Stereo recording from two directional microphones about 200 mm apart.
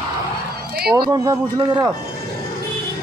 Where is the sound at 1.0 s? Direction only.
20° right (ahead or behind).